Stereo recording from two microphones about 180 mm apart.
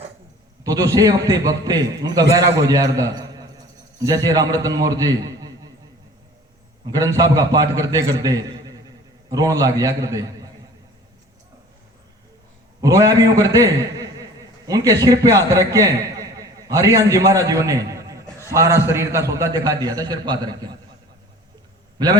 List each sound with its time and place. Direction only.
0.9 s a man's voice: 20° right (ahead or behind)
6.8 s a man's voice: 20° right (ahead or behind)
12.8 s a man's voice: 20° right (ahead or behind)
21.9 s a man's voice: 25° right (ahead or behind)